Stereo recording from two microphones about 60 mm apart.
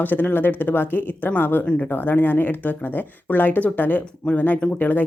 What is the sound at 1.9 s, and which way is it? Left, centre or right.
Speech, left.